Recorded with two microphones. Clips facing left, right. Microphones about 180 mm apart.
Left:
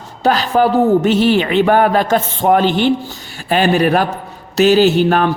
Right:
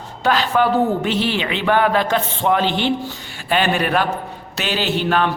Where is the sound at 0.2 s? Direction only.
40° left (ahead or behind).